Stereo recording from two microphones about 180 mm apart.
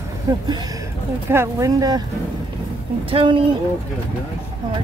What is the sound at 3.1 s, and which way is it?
Speech, 30° right (ahead or behind).